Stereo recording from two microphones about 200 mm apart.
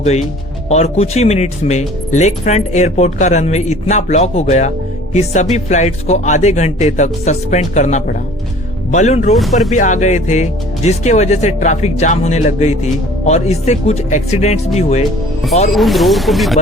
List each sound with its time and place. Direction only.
0.0 s speech: 35° left (ahead or behind)
9.3 s speech: centre (ahead or behind)
9.7 s speech: 35° left (ahead or behind)
15.7 s speech: centre (ahead or behind)